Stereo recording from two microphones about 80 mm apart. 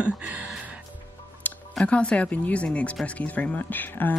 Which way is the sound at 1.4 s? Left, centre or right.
Left.